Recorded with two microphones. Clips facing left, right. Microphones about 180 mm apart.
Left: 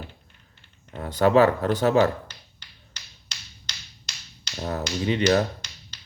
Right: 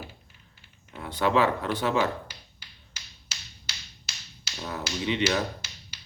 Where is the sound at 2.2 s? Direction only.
10° right (ahead or behind).